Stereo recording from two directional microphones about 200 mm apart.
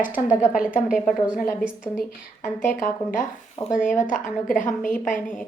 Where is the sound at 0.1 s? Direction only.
10° right (ahead or behind).